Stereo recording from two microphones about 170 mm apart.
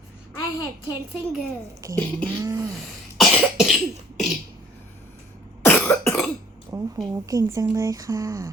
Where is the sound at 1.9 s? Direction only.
10° left (ahead or behind).